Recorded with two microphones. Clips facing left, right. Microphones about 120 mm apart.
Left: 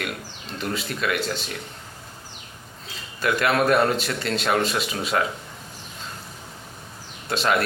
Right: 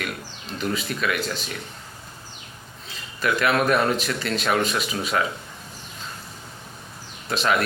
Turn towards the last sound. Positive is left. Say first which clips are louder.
# even
turn(degrees=30)  # may be behind; listen again after turning